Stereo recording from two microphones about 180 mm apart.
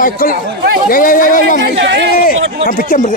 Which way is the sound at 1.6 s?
80° right.